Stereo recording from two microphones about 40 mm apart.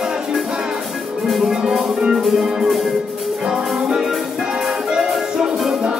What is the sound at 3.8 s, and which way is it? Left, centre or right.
Music, centre.